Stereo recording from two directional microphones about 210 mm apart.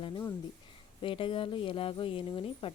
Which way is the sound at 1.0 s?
25° left (ahead or behind).